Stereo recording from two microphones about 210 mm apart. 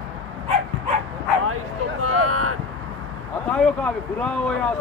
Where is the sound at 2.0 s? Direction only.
90° right.